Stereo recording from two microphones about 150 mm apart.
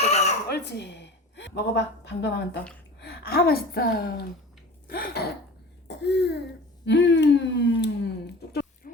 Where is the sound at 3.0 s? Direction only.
90° left.